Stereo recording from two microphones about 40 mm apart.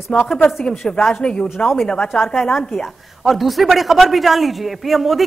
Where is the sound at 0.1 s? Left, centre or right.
Centre.